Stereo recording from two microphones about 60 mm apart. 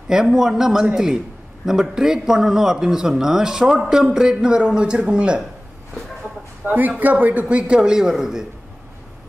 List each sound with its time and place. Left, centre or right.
0.1 s speech: centre
6.6 s speech: right; by 8.5 s centre